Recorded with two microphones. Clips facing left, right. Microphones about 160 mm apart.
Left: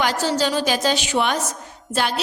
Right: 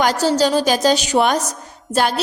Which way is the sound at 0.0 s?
40° right (ahead or behind).